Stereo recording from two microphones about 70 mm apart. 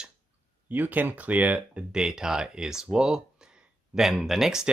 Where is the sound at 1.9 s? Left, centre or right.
Centre.